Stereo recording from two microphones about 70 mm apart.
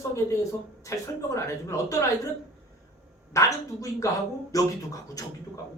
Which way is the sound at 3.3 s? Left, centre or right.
Left.